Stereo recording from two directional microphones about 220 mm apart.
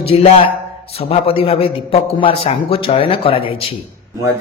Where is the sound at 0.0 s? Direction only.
25° left (ahead or behind).